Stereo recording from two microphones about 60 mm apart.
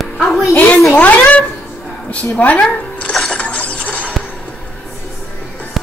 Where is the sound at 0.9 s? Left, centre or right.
Left.